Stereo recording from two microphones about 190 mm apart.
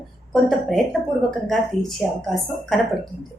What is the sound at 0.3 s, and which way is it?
Speech, centre (ahead or behind).